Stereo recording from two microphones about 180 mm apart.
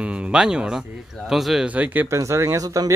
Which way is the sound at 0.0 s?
5° right (ahead or behind).